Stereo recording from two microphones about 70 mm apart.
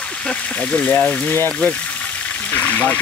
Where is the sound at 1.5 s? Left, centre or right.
Centre.